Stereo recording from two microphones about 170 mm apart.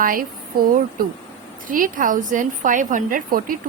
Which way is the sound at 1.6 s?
55° right (ahead or behind).